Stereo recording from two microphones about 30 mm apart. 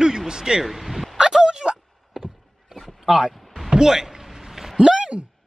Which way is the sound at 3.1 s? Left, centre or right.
Centre.